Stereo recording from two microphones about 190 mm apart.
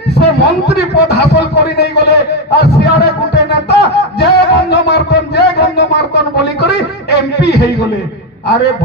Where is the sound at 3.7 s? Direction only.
60° left (ahead or behind).